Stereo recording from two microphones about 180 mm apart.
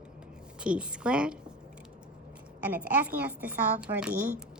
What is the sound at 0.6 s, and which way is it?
Speech, 5° right (ahead or behind).